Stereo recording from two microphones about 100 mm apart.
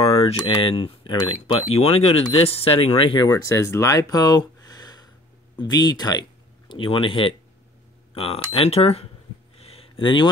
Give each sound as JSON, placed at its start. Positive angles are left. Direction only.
{"t": 0.0, "sound": "speech", "side_deg": 75}
{"t": 1.8, "sound": "speech", "side_deg": 90}
{"t": 3.4, "sound": "speech", "side_deg": 30}
{"t": 6.7, "sound": "speech", "side_deg": 60}
{"t": 9.6, "sound": "a sound", "side_deg": 85}
{"t": 10.0, "sound": "speech", "side_deg": 50}